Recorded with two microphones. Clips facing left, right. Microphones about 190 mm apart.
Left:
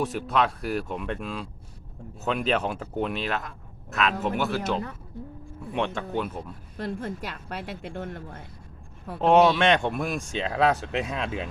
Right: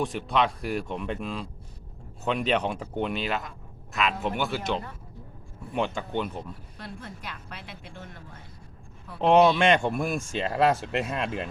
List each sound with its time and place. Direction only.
0.0 s speech: 5° left (ahead or behind)
6.7 s speech: 45° left (ahead or behind)
9.2 s speech: centre (ahead or behind)